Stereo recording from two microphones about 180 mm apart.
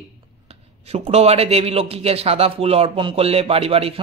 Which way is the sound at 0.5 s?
35° right (ahead or behind).